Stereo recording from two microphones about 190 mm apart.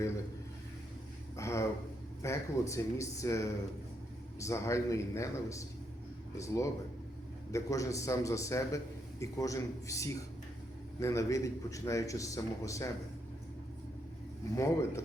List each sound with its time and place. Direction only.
1.4 s a man's voice: 15° left (ahead or behind)
14.5 s a man's voice: 15° left (ahead or behind)